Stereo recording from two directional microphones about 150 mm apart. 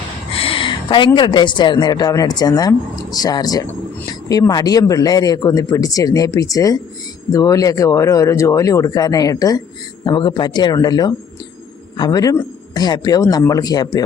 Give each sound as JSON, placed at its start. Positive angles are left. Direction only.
{"t": 0.3, "sound": "a woman's voice", "side_deg": 35}